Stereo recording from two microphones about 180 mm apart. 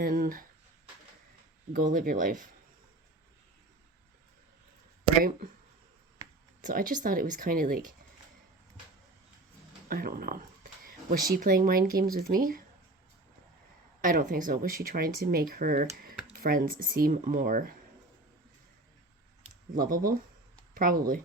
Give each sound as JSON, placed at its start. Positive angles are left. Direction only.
{"t": 0.0, "sound": "speech", "side_deg": -50}
{"t": 1.7, "sound": "speech", "side_deg": -50}
{"t": 6.6, "sound": "speech", "side_deg": -45}
{"t": 9.9, "sound": "a sound", "side_deg": -55}
{"t": 11.3, "sound": "speech", "side_deg": -55}
{"t": 14.0, "sound": "speech", "side_deg": -50}
{"t": 19.7, "sound": "speech", "side_deg": -50}